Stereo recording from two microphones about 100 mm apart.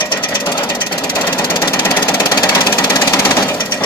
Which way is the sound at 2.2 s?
35° left (ahead or behind).